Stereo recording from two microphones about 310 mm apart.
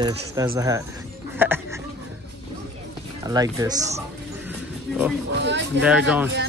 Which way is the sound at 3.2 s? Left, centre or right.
Centre.